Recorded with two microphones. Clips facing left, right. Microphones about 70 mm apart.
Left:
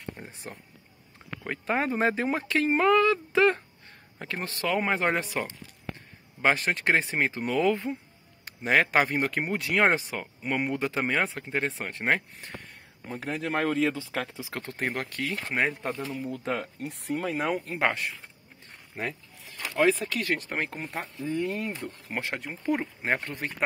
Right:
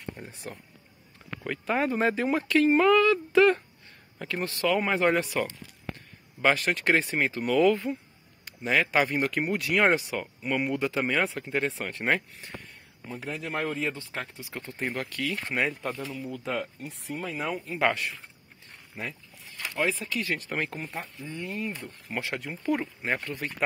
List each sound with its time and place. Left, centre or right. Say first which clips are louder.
0.1 s speech: right 1 dB; left
8.5 s speech: left 2 dB; left
13.0 s speech: left 3 dB; left
15.0 s speech: even; left
16.1 s speech: left 2 dB; left
17.7 s speech: right 5 dB; left
19.8 s speech: left 5 dB; left
20.3 s speech: even; left
21.4 s speech: left 1 dB; left
22.1 s speech: right 1 dB; left